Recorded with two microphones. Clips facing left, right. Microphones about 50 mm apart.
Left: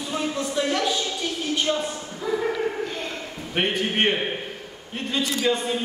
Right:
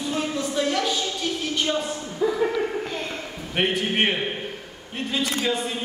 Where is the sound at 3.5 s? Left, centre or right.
Centre.